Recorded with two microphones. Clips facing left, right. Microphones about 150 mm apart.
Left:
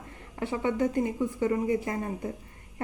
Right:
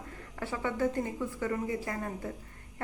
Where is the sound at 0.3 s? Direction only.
20° left (ahead or behind).